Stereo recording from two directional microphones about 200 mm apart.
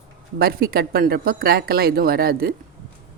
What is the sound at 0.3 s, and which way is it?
Speech, 50° right (ahead or behind).